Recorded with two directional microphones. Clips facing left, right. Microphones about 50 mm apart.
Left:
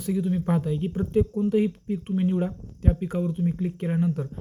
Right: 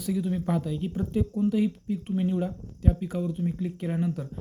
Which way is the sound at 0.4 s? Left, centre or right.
Left.